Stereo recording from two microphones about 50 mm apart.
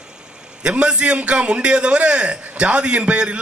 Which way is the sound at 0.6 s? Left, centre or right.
Right.